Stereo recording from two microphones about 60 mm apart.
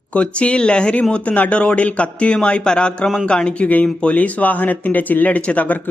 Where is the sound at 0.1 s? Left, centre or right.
Centre.